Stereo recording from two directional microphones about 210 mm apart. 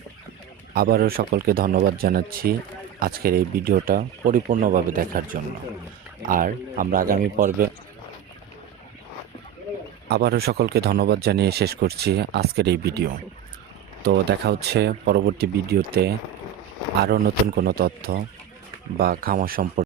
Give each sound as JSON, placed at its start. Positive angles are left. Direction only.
{"t": 0.7, "sound": "speech", "side_deg": -45}
{"t": 10.1, "sound": "speech", "side_deg": -50}